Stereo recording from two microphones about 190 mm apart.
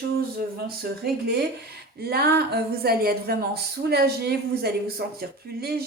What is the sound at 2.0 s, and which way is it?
Speech, 55° right (ahead or behind).